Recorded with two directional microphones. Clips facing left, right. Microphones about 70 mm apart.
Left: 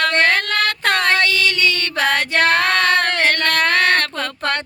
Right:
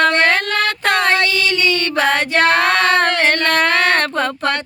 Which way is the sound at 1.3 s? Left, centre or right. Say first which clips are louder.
Right 1 dB; right.